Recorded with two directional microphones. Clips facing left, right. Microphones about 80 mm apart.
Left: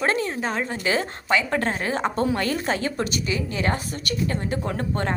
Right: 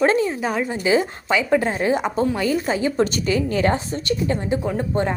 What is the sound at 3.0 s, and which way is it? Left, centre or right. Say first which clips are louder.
A woman's voice: right 6 dB; right.